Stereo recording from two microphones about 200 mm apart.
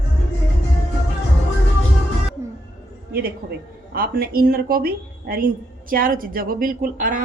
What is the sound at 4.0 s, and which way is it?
A woman's voice, 50° right (ahead or behind).